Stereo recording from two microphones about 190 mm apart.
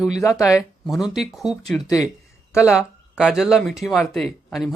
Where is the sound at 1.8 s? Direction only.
15° left (ahead or behind).